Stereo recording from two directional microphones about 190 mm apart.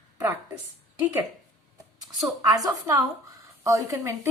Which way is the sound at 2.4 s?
20° right (ahead or behind).